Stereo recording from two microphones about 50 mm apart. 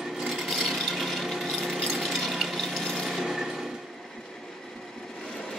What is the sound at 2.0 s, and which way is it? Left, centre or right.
Ratchet, centre.